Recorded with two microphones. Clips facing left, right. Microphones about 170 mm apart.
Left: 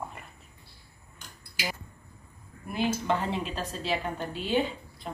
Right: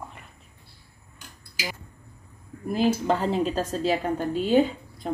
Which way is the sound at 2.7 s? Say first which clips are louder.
Right 5 dB; 35° right (ahead or behind).